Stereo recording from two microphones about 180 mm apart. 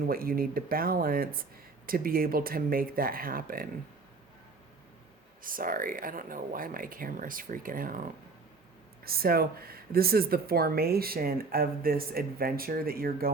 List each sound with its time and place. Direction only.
0.1 s speech: 55° right (ahead or behind)
5.4 s speech: 50° right (ahead or behind)
9.0 s speech: 55° right (ahead or behind)